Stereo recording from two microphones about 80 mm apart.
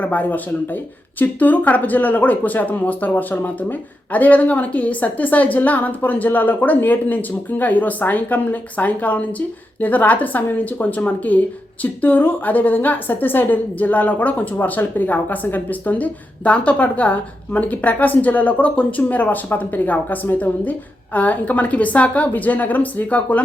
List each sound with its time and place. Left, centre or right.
0.0 s a woman's voice: centre